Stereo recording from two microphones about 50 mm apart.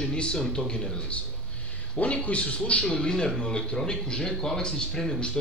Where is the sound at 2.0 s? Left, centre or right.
Left.